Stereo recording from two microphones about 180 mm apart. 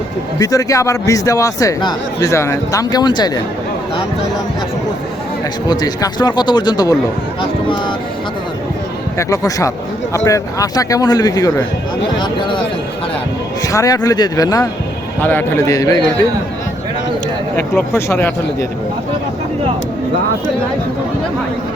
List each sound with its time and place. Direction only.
0.3 s a man's voice: 20° left (ahead or behind)
5.6 s a man's voice: 20° left (ahead or behind)
9.1 s a man's voice: 20° left (ahead or behind)
13.7 s a man's voice: 20° left (ahead or behind)
17.6 s a man's voice: 15° left (ahead or behind)